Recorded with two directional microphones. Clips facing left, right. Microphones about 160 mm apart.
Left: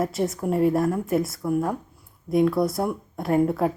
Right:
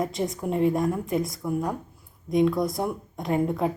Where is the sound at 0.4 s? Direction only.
5° left (ahead or behind).